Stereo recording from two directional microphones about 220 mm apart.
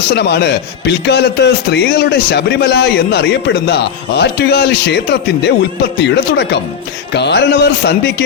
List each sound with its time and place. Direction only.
0.1 s a man's voice: 50° left (ahead or behind)